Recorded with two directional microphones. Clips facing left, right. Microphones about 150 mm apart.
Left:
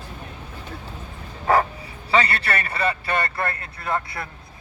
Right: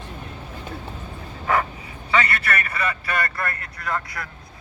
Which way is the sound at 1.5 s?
35° left (ahead or behind).